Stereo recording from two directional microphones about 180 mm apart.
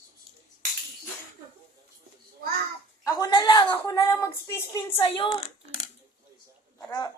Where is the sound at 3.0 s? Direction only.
20° left (ahead or behind).